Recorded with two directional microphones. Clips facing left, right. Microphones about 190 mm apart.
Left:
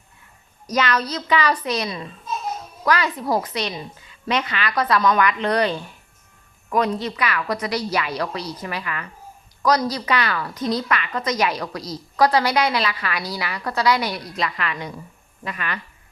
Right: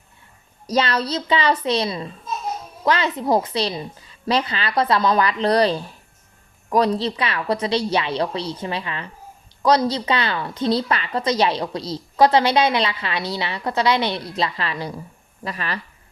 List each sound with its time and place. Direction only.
0.7 s a woman's voice: 30° right (ahead or behind)